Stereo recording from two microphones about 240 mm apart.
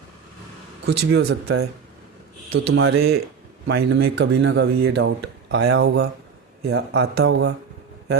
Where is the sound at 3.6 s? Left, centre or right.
Right.